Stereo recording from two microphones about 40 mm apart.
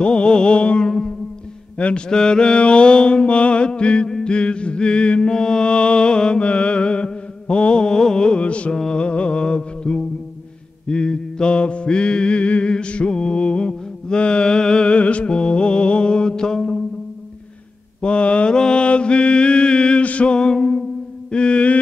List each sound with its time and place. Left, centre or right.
0.0 s music: left
1.8 s mantra: left
2.0 s mantra: centre
8.7 s music: left
10.9 s mantra: left
18.0 s mantra: left
20.1 s music: left
20.5 s music: centre
21.3 s mantra: left